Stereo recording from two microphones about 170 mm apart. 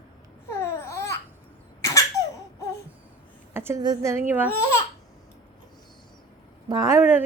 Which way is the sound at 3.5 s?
15° right (ahead or behind).